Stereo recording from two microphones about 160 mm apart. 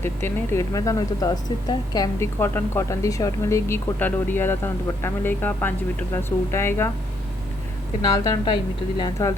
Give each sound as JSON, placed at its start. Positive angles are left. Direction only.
{"t": 0.0, "sound": "speech", "side_deg": 15}
{"t": 8.0, "sound": "a woman's voice", "side_deg": 20}